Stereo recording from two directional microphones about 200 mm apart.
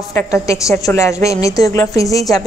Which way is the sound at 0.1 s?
15° left (ahead or behind).